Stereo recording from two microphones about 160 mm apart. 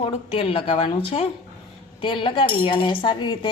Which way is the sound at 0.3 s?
35° left (ahead or behind).